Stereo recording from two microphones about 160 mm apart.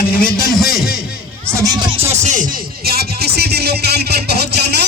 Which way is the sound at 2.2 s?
50° right (ahead or behind).